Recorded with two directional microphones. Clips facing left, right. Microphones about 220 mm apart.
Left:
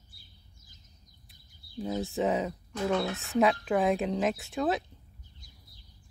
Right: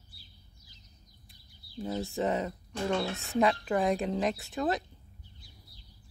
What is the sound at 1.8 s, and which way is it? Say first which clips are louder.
Speech: left 2 dB; centre (ahead or behind).